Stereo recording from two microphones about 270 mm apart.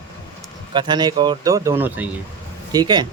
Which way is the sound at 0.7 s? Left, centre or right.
Centre.